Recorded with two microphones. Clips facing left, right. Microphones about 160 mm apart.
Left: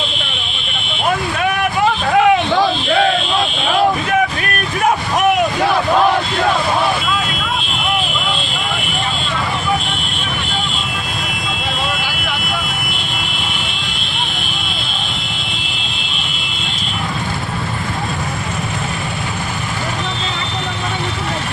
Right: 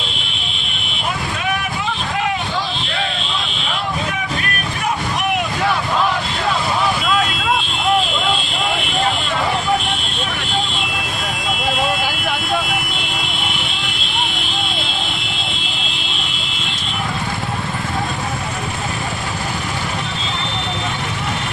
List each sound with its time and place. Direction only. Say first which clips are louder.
1.4 s vehicle: left 6 dB; 65° left (ahead or behind)